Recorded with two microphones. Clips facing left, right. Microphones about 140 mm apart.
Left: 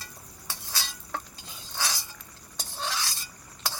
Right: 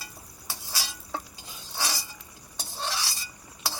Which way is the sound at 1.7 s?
10° right (ahead or behind).